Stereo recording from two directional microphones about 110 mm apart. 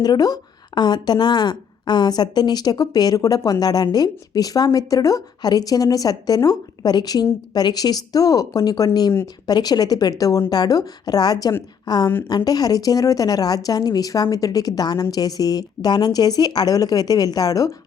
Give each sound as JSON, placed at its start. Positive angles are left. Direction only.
{"t": 0.0, "sound": "a woman's voice", "side_deg": 35}